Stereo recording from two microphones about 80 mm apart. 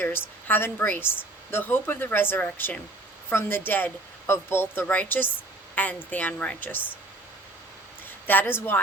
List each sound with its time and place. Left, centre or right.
0.0 s speech: left
8.3 s speech: left